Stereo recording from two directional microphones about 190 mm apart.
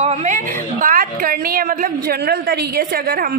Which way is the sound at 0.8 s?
50° right (ahead or behind).